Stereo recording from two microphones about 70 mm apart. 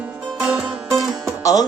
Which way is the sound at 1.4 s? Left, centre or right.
Left.